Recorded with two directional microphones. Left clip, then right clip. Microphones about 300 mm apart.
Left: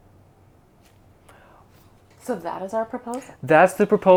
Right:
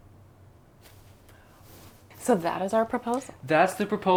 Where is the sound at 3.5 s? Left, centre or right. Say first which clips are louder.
Left 7 dB; left.